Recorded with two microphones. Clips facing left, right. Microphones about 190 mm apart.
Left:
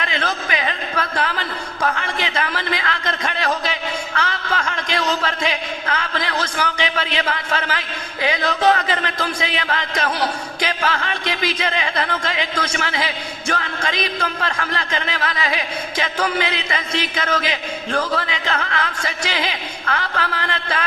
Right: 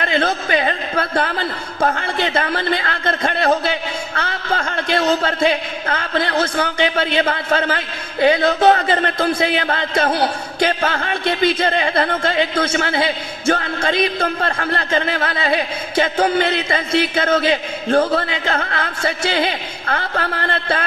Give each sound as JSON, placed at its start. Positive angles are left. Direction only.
{"t": 0.0, "sound": "a man's voice", "side_deg": -35}